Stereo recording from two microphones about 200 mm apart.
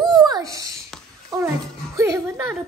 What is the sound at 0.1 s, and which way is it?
Babbling, 20° right (ahead or behind).